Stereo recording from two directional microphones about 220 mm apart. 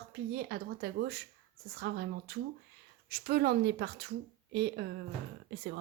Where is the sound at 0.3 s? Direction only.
50° right (ahead or behind).